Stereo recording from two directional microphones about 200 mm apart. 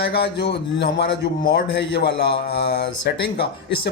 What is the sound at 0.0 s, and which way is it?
Speech, 55° left (ahead or behind).